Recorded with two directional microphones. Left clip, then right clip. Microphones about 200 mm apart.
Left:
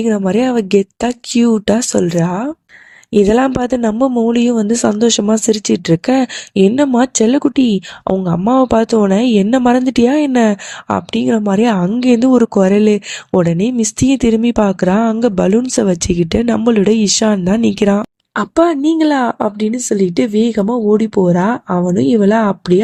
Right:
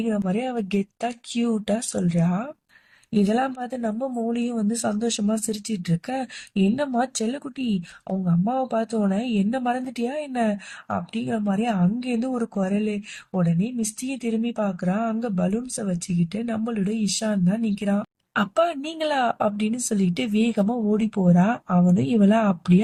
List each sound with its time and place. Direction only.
0.0 s speech: 40° left (ahead or behind)
18.3 s speech: 35° left (ahead or behind)